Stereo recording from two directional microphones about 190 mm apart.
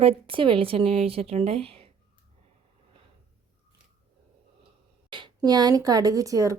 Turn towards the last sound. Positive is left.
turn(degrees=-15)  # may be behind; listen again after turning